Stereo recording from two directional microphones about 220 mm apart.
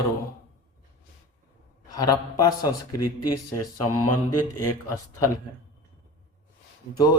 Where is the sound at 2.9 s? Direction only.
90° left.